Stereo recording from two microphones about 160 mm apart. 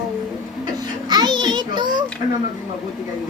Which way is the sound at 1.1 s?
25° right (ahead or behind).